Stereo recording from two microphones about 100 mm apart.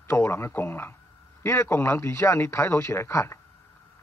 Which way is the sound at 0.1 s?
25° left (ahead or behind).